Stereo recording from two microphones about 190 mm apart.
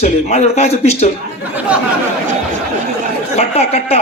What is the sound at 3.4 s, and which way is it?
Speech, 35° left (ahead or behind).